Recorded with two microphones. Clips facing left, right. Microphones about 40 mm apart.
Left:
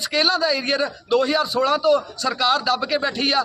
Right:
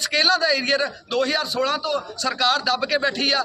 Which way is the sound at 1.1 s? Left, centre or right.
Left.